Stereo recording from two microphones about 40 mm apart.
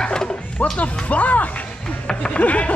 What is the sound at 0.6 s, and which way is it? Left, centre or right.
Speech, left.